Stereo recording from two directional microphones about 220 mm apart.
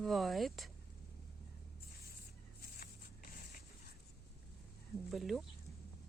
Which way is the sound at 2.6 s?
40° left (ahead or behind).